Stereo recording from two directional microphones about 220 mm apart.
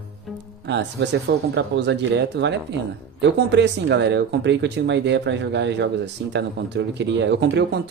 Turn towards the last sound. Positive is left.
turn(degrees=-50)  # may be behind; listen again after turning